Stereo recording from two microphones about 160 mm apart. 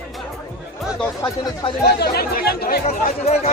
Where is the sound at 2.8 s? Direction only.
50° left (ahead or behind).